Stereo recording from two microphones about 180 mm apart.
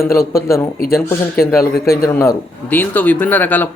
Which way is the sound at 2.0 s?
15° left (ahead or behind).